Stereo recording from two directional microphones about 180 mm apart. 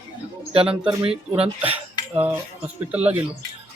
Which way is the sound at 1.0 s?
35° right (ahead or behind).